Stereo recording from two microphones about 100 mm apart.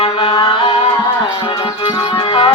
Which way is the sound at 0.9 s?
45° left (ahead or behind).